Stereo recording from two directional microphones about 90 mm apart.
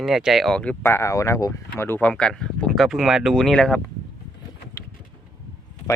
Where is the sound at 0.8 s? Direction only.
30° left (ahead or behind).